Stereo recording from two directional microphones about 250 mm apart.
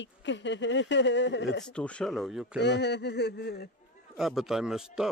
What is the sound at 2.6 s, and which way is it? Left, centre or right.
Speech, left.